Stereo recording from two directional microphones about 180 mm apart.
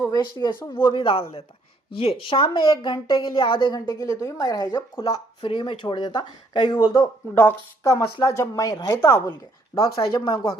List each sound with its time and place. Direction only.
0.0 s a woman's voice: 20° left (ahead or behind)
7.3 s a woman's voice: 15° left (ahead or behind)